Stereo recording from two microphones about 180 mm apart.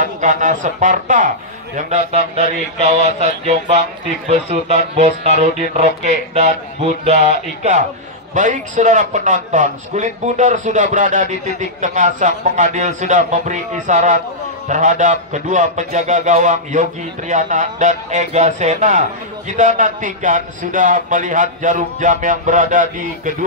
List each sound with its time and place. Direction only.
0.0 s a man's voice: 45° right (ahead or behind)
1.8 s music: 40° right (ahead or behind)
8.4 s a man's voice: 45° right (ahead or behind)